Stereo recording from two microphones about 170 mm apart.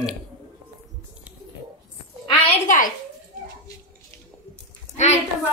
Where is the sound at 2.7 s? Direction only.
55° left (ahead or behind).